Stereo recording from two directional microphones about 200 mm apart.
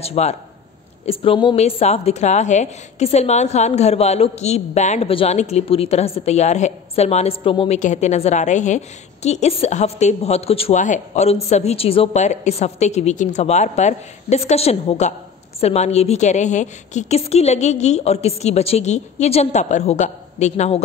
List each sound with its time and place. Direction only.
0.0 s a woman's voice: 30° left (ahead or behind)